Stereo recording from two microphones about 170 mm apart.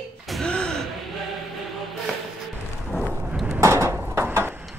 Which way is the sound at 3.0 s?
15° right (ahead or behind).